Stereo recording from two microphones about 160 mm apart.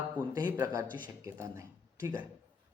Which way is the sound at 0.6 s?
20° right (ahead or behind).